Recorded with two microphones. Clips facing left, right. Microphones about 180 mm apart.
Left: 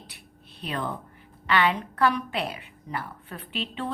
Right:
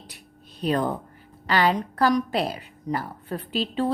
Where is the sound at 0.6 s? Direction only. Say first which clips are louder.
Right 8 dB; 40° right (ahead or behind).